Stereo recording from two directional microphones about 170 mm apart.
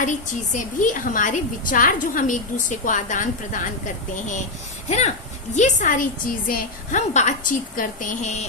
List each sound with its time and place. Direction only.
0.5 s a woman's voice: 50° left (ahead or behind)